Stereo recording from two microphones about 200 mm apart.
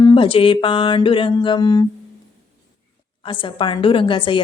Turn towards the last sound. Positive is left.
turn(degrees=25)  # may be behind; listen again after turning